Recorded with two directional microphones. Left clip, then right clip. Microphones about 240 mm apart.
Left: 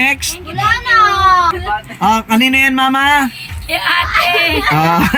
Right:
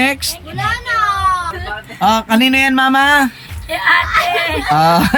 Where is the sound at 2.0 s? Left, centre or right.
Centre.